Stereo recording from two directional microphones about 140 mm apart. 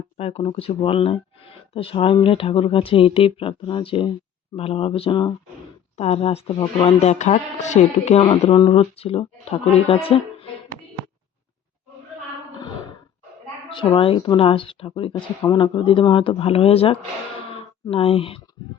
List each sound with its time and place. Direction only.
0.2 s speech: 45° left (ahead or behind)
6.5 s speech: 35° left (ahead or behind)
7.0 s speech: 55° left (ahead or behind)
8.2 s speech: 35° left (ahead or behind)
13.7 s speech: 35° left (ahead or behind)
15.1 s speech: 30° left (ahead or behind)